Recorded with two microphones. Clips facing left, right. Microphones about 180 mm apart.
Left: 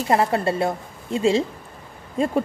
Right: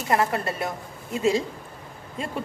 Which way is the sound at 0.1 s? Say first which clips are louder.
Left 4 dB; 30° left (ahead or behind).